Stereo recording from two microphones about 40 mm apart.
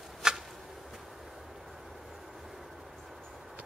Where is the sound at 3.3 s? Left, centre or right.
Centre.